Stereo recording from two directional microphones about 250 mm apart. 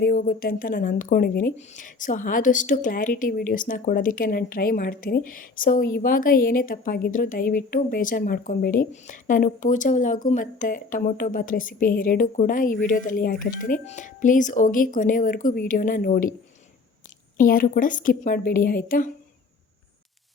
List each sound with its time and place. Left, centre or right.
0.0 s a woman's voice: left
17.3 s a woman's voice: left